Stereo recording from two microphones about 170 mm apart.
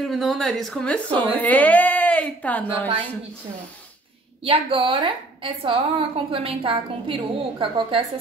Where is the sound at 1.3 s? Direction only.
10° left (ahead or behind).